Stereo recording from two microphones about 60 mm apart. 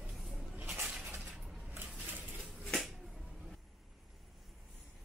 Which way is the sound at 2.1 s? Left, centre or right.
Right.